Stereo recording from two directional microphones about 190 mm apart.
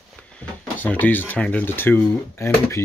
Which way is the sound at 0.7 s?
10° left (ahead or behind).